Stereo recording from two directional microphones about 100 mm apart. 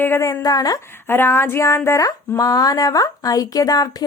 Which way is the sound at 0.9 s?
25° left (ahead or behind).